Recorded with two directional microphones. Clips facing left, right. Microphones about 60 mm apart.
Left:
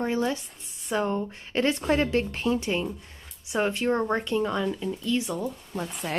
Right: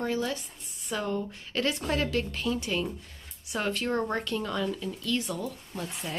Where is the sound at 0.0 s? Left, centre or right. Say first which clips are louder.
Left 4 dB; left.